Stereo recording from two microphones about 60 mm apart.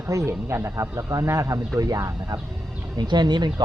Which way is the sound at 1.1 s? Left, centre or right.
Right.